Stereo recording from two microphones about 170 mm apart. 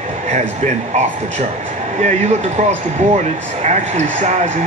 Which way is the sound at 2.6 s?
40° right (ahead or behind).